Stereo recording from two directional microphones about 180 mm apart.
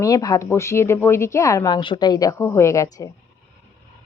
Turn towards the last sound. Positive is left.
turn(degrees=15)  # may be behind; listen again after turning